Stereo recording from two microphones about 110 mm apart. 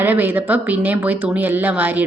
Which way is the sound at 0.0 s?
15° right (ahead or behind).